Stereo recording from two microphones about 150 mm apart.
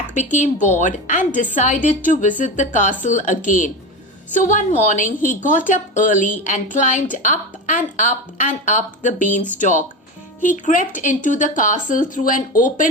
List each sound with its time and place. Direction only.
0.1 s a woman's voice: 55° left (ahead or behind)
10.4 s a woman's voice: 55° left (ahead or behind)